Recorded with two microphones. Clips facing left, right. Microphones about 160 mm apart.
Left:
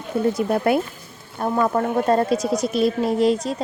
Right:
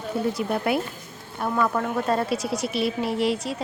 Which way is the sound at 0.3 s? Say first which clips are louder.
Left 5 dB; 50° left (ahead or behind).